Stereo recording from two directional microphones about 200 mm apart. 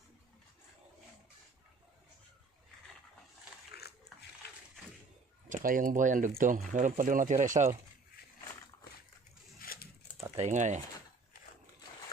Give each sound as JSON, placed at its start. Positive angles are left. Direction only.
{"t": 3.8, "sound": "dog", "side_deg": 55}
{"t": 5.6, "sound": "speech", "side_deg": -45}
{"t": 9.6, "sound": "a sound", "side_deg": 45}
{"t": 10.3, "sound": "speech", "side_deg": -35}